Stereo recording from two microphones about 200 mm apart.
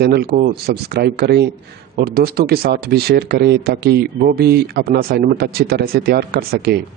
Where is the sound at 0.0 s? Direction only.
55° right (ahead or behind).